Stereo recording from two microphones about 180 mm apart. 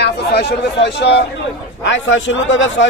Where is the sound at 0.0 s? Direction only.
65° left (ahead or behind).